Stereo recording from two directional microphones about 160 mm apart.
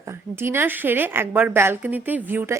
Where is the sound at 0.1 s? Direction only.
15° right (ahead or behind).